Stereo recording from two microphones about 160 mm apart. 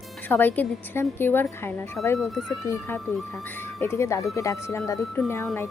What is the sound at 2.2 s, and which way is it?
Speech, centre (ahead or behind).